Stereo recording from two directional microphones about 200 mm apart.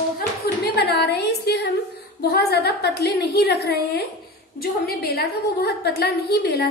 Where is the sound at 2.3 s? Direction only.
55° left (ahead or behind).